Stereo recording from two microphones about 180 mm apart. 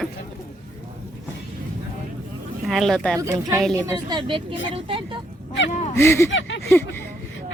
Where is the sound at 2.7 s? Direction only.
Centre (ahead or behind).